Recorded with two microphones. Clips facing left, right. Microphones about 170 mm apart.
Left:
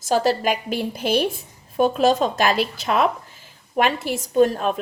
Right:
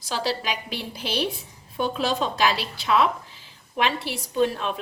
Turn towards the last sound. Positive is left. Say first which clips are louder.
# left 6 dB
turn(degrees=45)  # may be behind; listen again after turning